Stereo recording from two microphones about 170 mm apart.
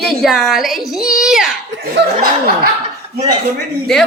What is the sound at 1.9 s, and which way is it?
Speech, 65° right (ahead or behind).